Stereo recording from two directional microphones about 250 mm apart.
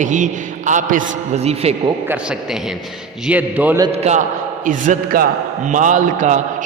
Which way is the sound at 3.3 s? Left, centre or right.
Centre.